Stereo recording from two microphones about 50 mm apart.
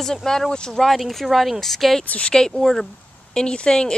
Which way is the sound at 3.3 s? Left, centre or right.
Centre.